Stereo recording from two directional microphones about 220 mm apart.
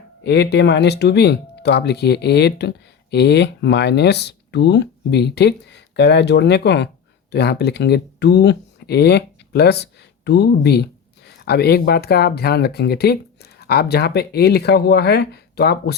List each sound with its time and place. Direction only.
0.2 s speech: 50° left (ahead or behind)